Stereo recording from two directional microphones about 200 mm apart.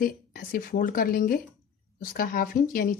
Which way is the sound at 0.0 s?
45° left (ahead or behind).